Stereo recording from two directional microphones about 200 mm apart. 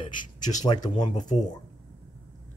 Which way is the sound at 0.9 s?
40° left (ahead or behind).